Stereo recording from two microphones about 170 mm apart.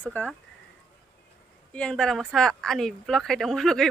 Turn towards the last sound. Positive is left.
turn(degrees=0)  # may be behind; listen again after turning